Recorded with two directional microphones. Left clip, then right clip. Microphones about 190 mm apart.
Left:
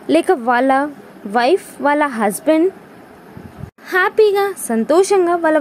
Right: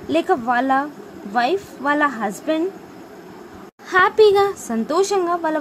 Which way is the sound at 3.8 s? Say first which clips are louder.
Even; 10° left (ahead or behind).